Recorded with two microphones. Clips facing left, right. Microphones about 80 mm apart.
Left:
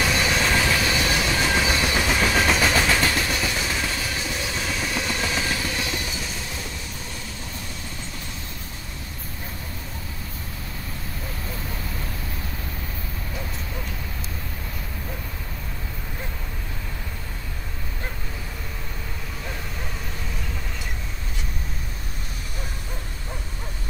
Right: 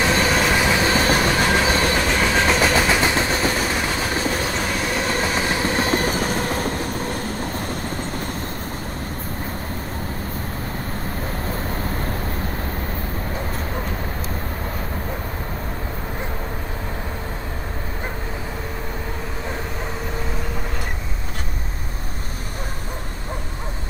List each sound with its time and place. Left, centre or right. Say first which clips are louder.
0.0 s train: right 4 dB; right
0.4 s train: right 3 dB; centre
0.8 s train: right 5 dB; right
2.2 s train: right 2 dB; centre
2.6 s vehicle: right 3 dB; centre
3.0 s vehicle: right 4 dB; right
11.4 s vehicle: right 7 dB; right
13.3 s vehicle: right 5 dB; right